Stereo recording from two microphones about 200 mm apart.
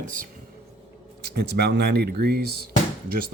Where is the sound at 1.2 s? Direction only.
55° right (ahead or behind).